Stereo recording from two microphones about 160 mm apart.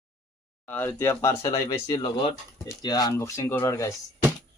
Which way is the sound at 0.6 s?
10° left (ahead or behind).